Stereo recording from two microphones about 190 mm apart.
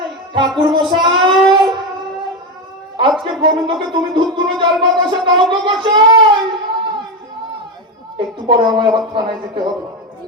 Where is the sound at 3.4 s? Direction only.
25° right (ahead or behind).